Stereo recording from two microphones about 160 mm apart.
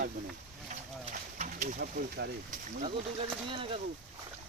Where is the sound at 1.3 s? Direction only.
50° right (ahead or behind).